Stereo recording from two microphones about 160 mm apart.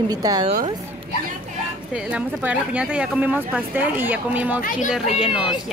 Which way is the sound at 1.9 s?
10° right (ahead or behind).